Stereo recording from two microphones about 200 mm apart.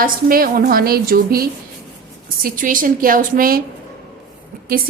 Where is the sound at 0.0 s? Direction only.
45° right (ahead or behind).